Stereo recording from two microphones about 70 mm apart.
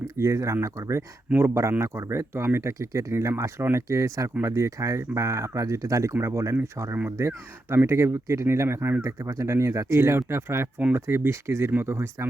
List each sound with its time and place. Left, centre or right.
0.2 s speech: right